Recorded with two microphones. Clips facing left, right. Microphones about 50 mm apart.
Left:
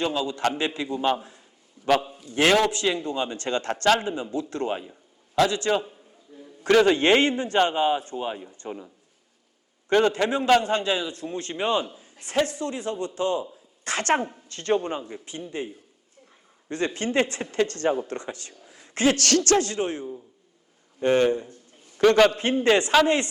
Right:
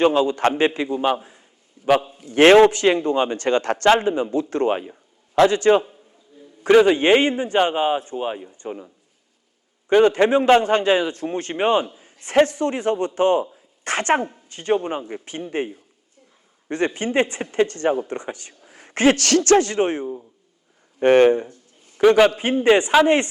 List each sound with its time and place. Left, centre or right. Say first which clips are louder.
0.0 s a man's voice: right 8 dB; right
1.8 s a sound: right 5 dB; right
2.2 s a man's voice: right 11 dB; right
6.7 s a man's voice: right 4 dB; centre
8.6 s speech: right 4 dB; centre
9.9 s a man's voice: right 6 dB; right
14.0 s a man's voice: right 3 dB; right
15.0 s a man's voice: right 5 dB; right
18.7 s a sound: right 5 dB; right
19.2 s a man's voice: right 5 dB; right
22.0 s a man's voice: right 3 dB; centre